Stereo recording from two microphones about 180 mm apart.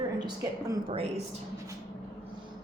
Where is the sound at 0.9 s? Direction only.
30° right (ahead or behind).